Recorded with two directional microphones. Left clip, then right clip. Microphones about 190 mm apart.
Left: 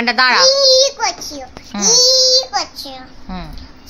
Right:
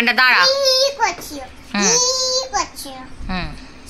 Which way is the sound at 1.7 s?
5° left (ahead or behind).